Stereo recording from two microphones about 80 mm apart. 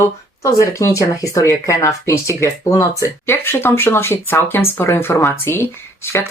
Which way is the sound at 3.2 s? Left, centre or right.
Left.